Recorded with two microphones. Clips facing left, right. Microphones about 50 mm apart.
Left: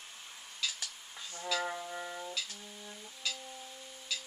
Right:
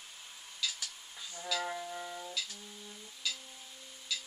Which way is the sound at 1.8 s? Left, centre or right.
Centre.